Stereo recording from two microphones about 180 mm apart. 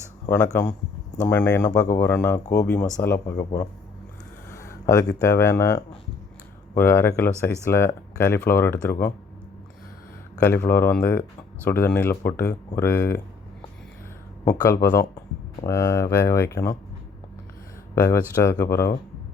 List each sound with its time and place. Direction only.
0.3 s speech: 15° left (ahead or behind)
10.4 s speech: 15° left (ahead or behind)
14.8 s speech: 15° left (ahead or behind)
17.9 s speech: 15° left (ahead or behind)